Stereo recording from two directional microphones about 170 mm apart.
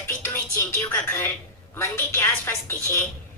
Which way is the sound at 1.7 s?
15° left (ahead or behind).